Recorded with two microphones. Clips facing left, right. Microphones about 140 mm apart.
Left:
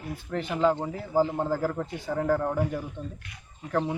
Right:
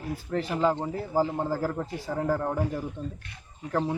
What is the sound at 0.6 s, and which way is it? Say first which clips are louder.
Speech: left 3 dB; centre (ahead or behind).